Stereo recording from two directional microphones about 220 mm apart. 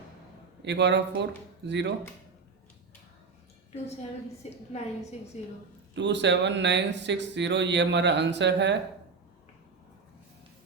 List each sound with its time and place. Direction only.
0.6 s speech: 50° right (ahead or behind)
4.7 s a woman's voice: 30° left (ahead or behind)
5.9 s speech: 55° right (ahead or behind)